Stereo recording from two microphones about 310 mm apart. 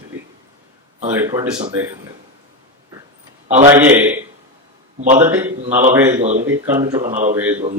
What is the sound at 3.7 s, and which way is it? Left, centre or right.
Speech, centre.